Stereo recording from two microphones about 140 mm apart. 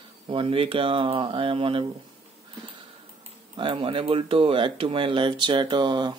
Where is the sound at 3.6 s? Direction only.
40° right (ahead or behind).